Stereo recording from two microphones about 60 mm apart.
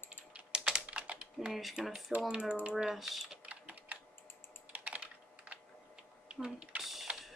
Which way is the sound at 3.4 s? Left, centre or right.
Right.